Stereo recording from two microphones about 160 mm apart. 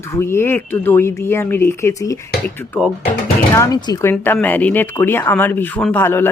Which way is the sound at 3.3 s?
20° left (ahead or behind).